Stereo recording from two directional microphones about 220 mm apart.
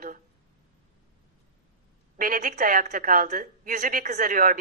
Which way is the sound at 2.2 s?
35° right (ahead or behind).